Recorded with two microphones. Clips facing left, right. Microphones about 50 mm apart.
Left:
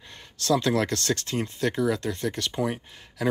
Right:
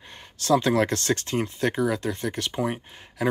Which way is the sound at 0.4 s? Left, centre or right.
Right.